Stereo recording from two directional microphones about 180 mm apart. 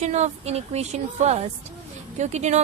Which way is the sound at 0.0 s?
40° right (ahead or behind).